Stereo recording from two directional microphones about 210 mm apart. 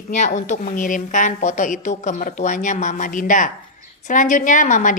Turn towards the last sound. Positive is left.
turn(degrees=35)  # may be behind; listen again after turning